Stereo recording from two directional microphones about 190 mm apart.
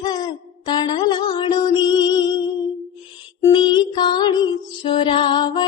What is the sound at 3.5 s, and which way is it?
Music, 25° left (ahead or behind).